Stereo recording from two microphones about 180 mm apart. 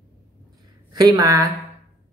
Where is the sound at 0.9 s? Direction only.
20° right (ahead or behind).